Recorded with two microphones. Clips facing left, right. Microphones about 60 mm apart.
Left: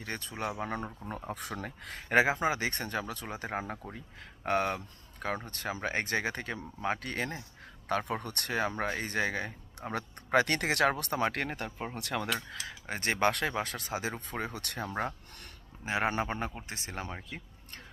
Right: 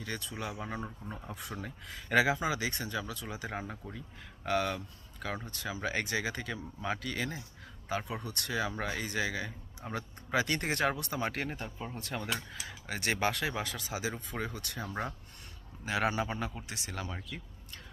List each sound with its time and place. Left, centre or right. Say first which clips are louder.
0.0 s speech: left 2 dB; left
0.6 s speech: left 3 dB; left
2.0 s speech: left 2 dB; left
7.9 s speech: left 4 dB; left
11.9 s speech: left 5 dB; left
12.6 s speech: even; left
15.9 s speech: left 1 dB; left
17.2 s a sound: even; left